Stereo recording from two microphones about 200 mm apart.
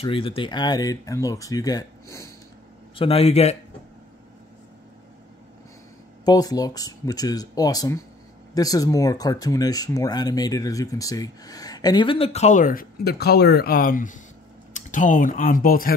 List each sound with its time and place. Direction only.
0.0 s speech: 25° left (ahead or behind)
3.0 s speech: 30° left (ahead or behind)
6.2 s speech: 20° left (ahead or behind); by 15.9 s 45° left (ahead or behind)